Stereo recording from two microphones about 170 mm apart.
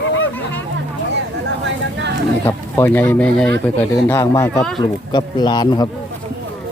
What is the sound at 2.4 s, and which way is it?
Speech, 10° left (ahead or behind).